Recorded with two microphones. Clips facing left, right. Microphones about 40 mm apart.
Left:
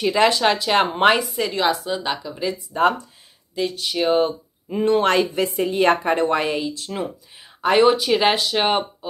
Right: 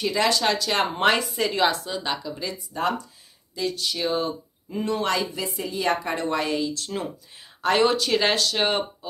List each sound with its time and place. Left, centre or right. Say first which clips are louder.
0.0 s speech: left 5 dB; left
1.2 s a woman's voice: left 1 dB; centre
2.7 s speech: left 7 dB; left
6.6 s speech: left 2 dB; centre